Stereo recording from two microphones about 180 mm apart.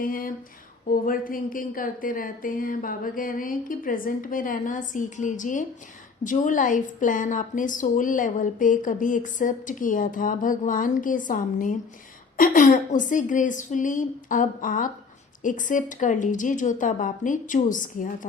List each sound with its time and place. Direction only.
0.0 s a woman's voice: 50° left (ahead or behind)